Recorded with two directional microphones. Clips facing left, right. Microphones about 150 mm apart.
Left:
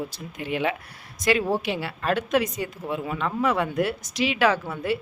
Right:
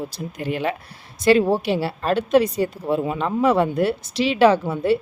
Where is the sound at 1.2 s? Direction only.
30° right (ahead or behind).